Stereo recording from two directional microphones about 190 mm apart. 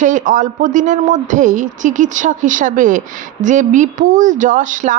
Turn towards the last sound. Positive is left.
turn(degrees=-40)  # may be behind; listen again after turning